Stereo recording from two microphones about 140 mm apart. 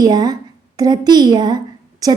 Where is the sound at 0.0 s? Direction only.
30° right (ahead or behind).